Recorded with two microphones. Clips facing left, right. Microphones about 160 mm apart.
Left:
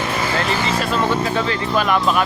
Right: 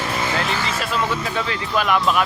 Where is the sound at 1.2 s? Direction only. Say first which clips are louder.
Left 4 dB; centre (ahead or behind).